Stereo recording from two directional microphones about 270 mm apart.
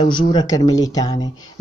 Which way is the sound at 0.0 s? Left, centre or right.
Centre.